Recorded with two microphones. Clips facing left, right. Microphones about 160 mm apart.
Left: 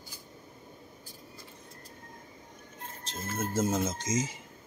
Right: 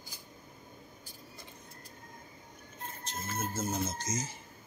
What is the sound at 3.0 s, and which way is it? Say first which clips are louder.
Speech: left 3 dB; 90° left.